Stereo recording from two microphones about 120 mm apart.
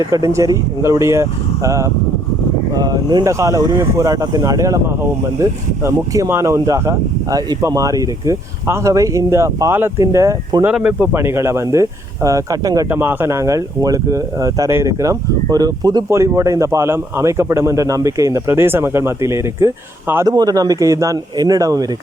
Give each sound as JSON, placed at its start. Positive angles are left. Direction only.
{"t": 0.1, "sound": "speech", "side_deg": -25}
{"t": 10.7, "sound": "speech", "side_deg": -10}
{"t": 12.9, "sound": "speech", "side_deg": -15}
{"t": 16.0, "sound": "speech", "side_deg": -25}
{"t": 20.2, "sound": "speech", "side_deg": -35}